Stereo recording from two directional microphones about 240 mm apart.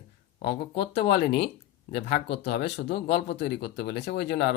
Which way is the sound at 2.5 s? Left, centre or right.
Left.